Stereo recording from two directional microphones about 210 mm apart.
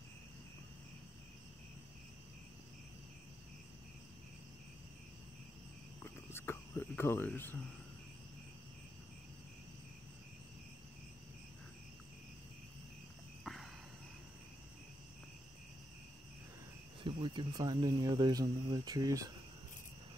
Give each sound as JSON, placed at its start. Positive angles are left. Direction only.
{"t": 6.0, "sound": "speech", "side_deg": 10}
{"t": 13.4, "sound": "cricket", "side_deg": 0}
{"t": 17.0, "sound": "speech", "side_deg": -25}